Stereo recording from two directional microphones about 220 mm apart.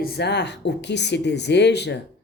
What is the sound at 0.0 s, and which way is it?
A woman's voice, 45° left (ahead or behind).